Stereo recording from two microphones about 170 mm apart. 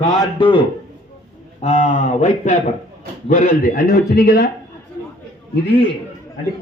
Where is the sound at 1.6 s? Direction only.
50° left (ahead or behind).